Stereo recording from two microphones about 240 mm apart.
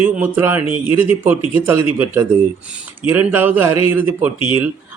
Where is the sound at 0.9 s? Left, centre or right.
Centre.